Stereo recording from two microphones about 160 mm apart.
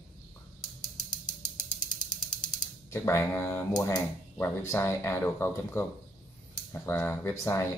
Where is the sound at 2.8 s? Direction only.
15° left (ahead or behind).